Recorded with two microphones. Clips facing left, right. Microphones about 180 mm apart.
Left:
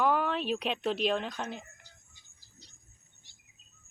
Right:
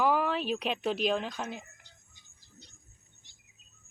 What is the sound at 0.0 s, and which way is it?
Speech, 5° right (ahead or behind).